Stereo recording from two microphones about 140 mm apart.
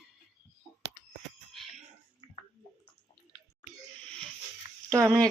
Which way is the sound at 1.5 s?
Centre (ahead or behind).